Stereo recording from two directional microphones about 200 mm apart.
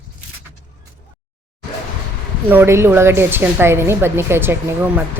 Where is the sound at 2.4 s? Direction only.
10° right (ahead or behind).